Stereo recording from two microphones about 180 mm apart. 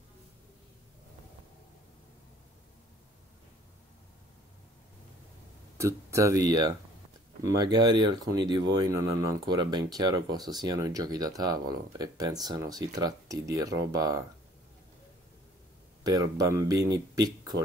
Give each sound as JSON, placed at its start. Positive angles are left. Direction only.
{"t": 5.8, "sound": "speech", "side_deg": -15}
{"t": 16.0, "sound": "speech", "side_deg": -20}